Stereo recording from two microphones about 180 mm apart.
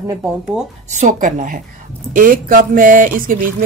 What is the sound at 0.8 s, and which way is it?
Speech, 40° right (ahead or behind).